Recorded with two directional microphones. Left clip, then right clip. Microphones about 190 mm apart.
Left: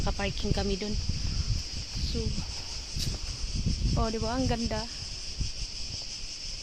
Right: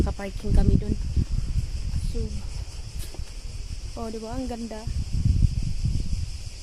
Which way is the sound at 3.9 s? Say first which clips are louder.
Left 2 dB; 15° left (ahead or behind).